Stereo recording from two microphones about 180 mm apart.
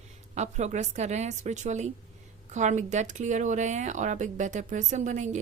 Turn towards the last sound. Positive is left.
turn(degrees=-40)  # may be behind; listen again after turning